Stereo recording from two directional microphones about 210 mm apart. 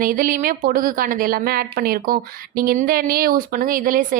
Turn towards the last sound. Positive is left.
turn(degrees=-40)  # may be behind; listen again after turning